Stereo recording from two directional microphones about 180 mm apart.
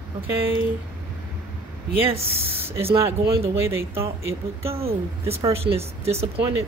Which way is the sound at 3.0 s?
15° right (ahead or behind).